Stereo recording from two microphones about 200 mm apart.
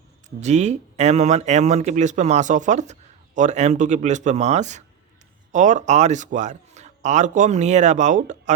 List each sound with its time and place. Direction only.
0.3 s speech: 35° right (ahead or behind)